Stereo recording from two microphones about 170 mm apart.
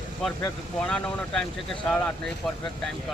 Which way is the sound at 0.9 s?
5° left (ahead or behind).